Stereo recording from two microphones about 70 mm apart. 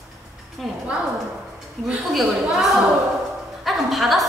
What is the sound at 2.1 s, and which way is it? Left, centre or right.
A woman's voice, centre.